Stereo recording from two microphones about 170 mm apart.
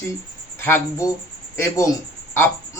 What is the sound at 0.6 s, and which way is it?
Speech, 15° left (ahead or behind).